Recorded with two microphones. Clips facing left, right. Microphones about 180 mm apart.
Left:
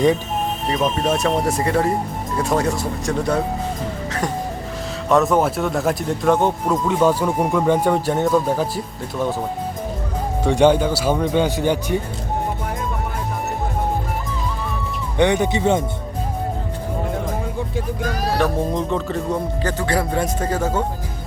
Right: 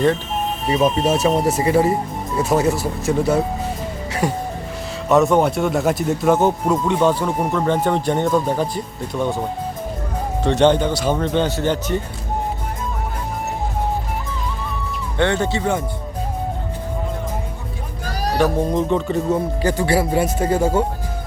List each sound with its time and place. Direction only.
0.7 s speech: 5° right (ahead or behind)
10.4 s speech: 10° left (ahead or behind)
15.2 s speech: 15° left (ahead or behind)
18.7 s speech: centre (ahead or behind)